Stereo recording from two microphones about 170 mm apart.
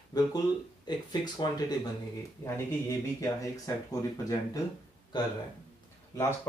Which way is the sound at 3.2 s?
20° left (ahead or behind).